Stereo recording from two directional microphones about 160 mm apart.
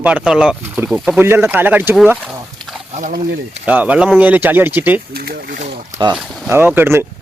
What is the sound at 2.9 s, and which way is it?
Speech, 55° right (ahead or behind).